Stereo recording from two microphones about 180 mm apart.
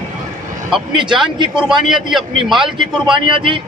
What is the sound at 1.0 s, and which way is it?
A man's voice, 5° right (ahead or behind).